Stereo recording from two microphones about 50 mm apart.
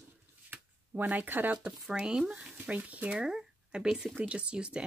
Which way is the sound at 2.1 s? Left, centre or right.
Centre.